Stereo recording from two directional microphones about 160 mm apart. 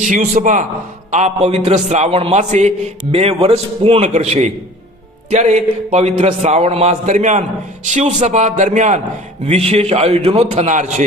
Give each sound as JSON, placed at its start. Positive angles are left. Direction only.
{"t": 0.0, "sound": "a man's voice", "side_deg": -55}